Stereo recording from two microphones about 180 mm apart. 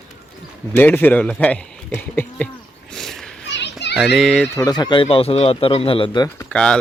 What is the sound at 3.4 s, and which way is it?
Children playing, 80° left.